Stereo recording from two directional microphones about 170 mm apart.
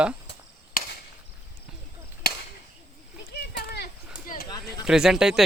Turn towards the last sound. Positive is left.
turn(degrees=-5)  # may be behind; listen again after turning